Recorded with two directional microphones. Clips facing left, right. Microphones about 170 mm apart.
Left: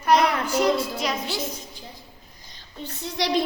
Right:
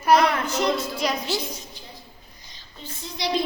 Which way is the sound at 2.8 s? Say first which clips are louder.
Left 3 dB; 70° left (ahead or behind).